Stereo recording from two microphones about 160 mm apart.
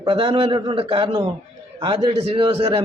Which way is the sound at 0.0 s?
30° right (ahead or behind).